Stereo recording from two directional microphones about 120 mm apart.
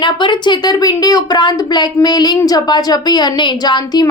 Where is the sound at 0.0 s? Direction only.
40° left (ahead or behind).